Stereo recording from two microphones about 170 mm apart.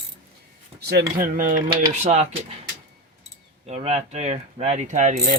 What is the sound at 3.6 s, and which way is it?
Speech, 40° right (ahead or behind).